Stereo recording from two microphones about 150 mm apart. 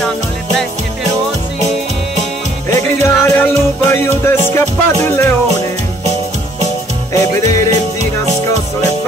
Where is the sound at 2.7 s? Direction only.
15° left (ahead or behind).